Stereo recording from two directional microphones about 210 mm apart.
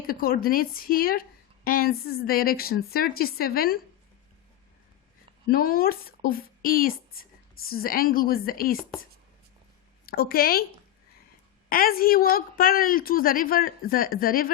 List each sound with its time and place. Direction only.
0.1 s a woman's voice: 45° left (ahead or behind)
5.5 s speech: 45° left (ahead or behind)
10.1 s a woman's voice: 45° left (ahead or behind)
11.7 s a woman's voice: 45° left (ahead or behind)